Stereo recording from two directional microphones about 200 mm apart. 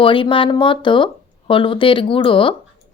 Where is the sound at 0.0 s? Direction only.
25° left (ahead or behind).